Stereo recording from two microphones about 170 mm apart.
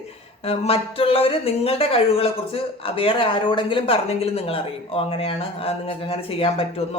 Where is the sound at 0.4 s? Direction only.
35° left (ahead or behind).